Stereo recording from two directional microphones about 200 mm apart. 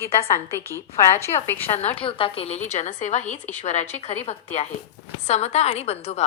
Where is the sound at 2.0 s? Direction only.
25° left (ahead or behind).